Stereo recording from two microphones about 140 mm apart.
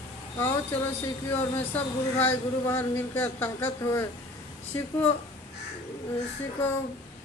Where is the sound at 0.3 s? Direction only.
20° left (ahead or behind).